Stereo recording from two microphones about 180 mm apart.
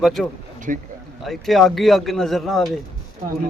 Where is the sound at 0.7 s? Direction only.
50° right (ahead or behind).